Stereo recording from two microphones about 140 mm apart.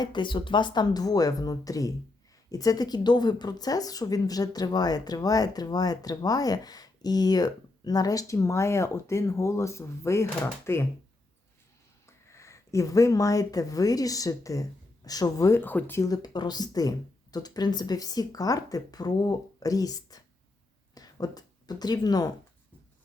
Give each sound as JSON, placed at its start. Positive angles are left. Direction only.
{"t": 0.0, "sound": "speech", "side_deg": 35}
{"t": 12.0, "sound": "speech", "side_deg": 20}